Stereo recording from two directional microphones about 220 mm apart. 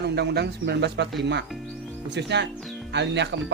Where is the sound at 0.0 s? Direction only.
50° right (ahead or behind).